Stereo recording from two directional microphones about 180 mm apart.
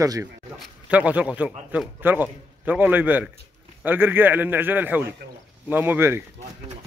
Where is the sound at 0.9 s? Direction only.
5° right (ahead or behind).